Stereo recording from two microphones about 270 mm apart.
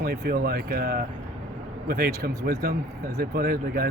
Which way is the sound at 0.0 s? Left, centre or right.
Right.